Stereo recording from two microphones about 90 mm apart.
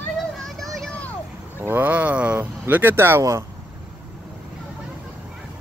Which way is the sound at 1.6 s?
20° right (ahead or behind).